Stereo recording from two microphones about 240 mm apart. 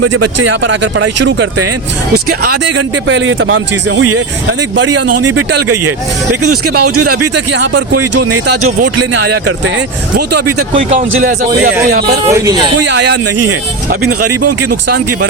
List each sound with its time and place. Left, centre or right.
0.0 s speech: right
2.1 s speech: right
3.1 s speech: right
5.0 s speech: right
7.3 s speech: right
9.0 s speech: right
10.2 s speech: right
10.8 s speech: right
12.3 s speech: centre
12.9 s speech: right
14.1 s speech: right